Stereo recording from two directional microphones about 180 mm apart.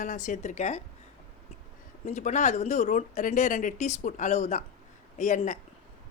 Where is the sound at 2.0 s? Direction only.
40° left (ahead or behind).